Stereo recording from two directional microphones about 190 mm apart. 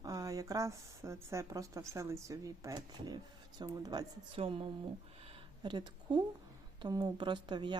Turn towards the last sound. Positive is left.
turn(degrees=-25)  # may be behind; listen again after turning